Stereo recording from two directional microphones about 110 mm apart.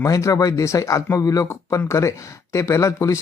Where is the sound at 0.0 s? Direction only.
25° left (ahead or behind).